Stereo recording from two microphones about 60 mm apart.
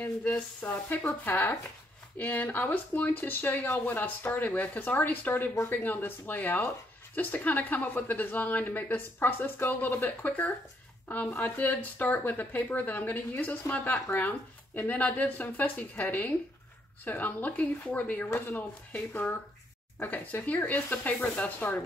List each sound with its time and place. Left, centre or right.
0.3 s speech: left